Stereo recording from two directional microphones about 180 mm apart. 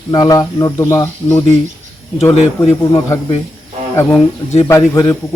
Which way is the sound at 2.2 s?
35° left (ahead or behind).